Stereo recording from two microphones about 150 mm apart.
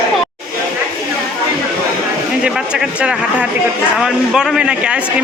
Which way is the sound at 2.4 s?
5° right (ahead or behind).